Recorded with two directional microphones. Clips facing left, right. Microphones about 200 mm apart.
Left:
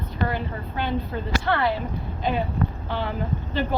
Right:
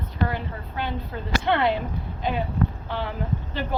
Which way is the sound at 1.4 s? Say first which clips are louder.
Right 2 dB; 20° right (ahead or behind).